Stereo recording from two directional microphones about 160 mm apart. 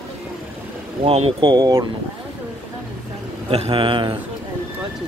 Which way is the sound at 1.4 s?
25° right (ahead or behind).